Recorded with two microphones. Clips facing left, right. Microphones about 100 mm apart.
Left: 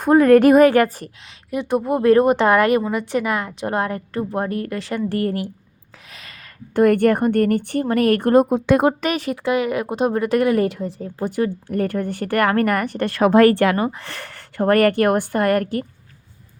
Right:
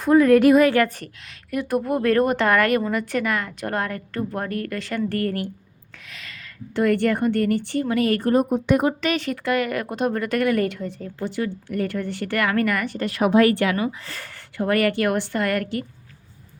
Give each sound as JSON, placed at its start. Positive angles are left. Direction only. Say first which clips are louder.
{"t": 0.0, "sound": "a woman's voice", "louder": "left 3 dB", "side_deg": 50}
{"t": 0.8, "sound": "a woman's voice", "louder": "left 3 dB", "side_deg": 30}
{"t": 6.1, "sound": "a sound", "louder": "right 1 dB", "side_deg": 35}
{"t": 6.7, "sound": "a woman's voice", "louder": "left 5 dB", "side_deg": 50}
{"t": 8.9, "sound": "a woman's voice", "louder": "left 2 dB", "side_deg": 45}
{"t": 9.5, "sound": "speech", "louder": "left 3 dB", "side_deg": 10}
{"t": 9.9, "sound": "a woman's voice", "louder": "left 6 dB", "side_deg": 30}
{"t": 13.0, "sound": "a woman's voice", "louder": "left 4 dB", "side_deg": 65}